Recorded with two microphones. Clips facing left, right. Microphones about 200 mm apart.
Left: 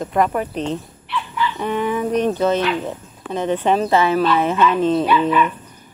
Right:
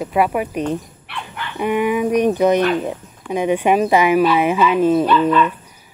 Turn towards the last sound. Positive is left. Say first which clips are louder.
# right 2 dB
turn(degrees=10)  # may be behind; listen again after turning